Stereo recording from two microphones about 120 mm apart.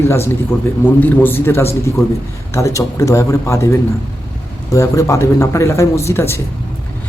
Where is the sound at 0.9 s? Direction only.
15° left (ahead or behind).